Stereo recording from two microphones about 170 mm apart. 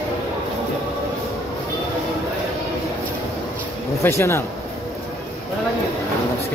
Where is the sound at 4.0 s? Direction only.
15° left (ahead or behind).